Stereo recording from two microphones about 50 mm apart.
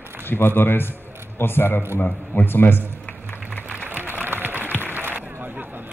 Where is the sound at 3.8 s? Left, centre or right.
Right.